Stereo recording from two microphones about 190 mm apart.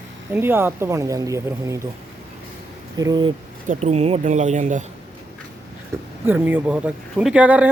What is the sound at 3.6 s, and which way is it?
Speech, 35° right (ahead or behind).